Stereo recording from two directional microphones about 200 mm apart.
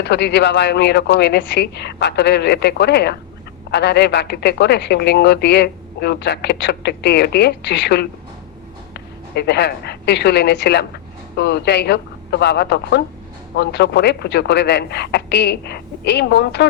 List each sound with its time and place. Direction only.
0.0 s a woman's voice: 55° left (ahead or behind)